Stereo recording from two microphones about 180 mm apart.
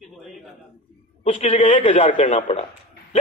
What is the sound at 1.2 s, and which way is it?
A man's voice, 35° left (ahead or behind).